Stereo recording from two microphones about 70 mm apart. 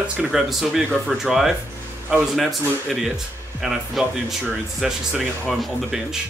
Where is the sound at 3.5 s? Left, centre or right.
Centre.